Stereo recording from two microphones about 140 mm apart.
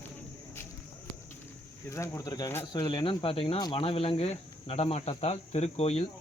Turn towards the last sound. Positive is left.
turn(degrees=50)  # may be behind; listen again after turning